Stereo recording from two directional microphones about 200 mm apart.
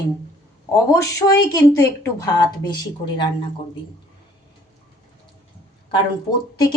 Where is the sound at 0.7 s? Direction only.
15° left (ahead or behind).